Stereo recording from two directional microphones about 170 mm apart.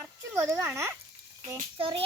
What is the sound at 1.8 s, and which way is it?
Child singing, 30° right (ahead or behind).